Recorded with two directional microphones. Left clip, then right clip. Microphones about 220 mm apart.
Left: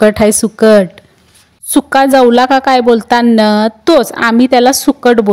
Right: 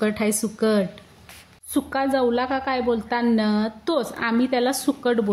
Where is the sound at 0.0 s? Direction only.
45° left (ahead or behind).